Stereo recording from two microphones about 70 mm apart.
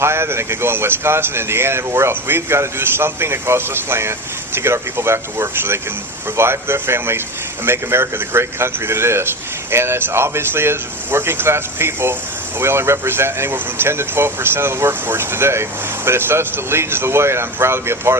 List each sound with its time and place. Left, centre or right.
0.0 s speech: right